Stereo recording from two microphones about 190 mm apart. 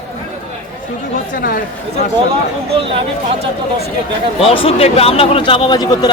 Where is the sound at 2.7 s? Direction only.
30° right (ahead or behind).